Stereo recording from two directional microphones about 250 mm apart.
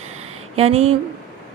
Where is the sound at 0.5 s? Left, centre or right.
Right.